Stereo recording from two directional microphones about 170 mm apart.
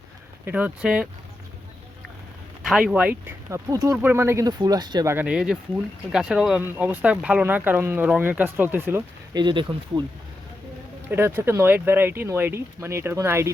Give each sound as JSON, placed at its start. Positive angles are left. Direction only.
{"t": 0.4, "sound": "speech", "side_deg": -10}
{"t": 2.6, "sound": "speech", "side_deg": -5}
{"t": 5.1, "sound": "speech", "side_deg": -5}
{"t": 9.3, "sound": "speech", "side_deg": -25}
{"t": 11.1, "sound": "speech", "side_deg": -15}